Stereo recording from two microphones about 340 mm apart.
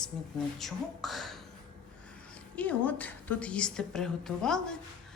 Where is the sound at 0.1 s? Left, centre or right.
Centre.